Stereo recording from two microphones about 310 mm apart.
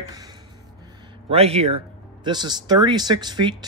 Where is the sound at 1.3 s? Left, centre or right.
Centre.